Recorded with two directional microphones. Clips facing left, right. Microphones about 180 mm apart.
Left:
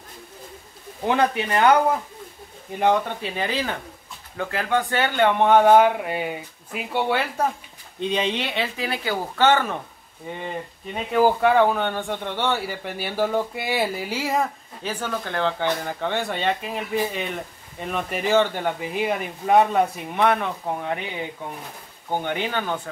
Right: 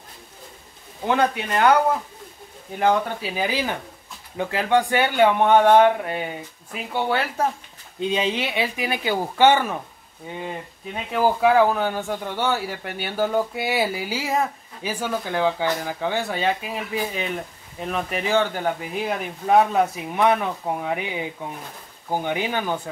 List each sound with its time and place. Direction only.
1.0 s speech: 20° left (ahead or behind)
2.7 s a man's voice: centre (ahead or behind)
5.4 s a man's voice: centre (ahead or behind)
11.1 s a man's voice: centre (ahead or behind)